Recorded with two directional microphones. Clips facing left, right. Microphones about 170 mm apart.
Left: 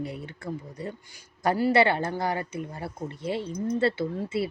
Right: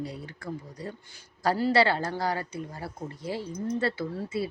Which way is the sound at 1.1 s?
15° left (ahead or behind).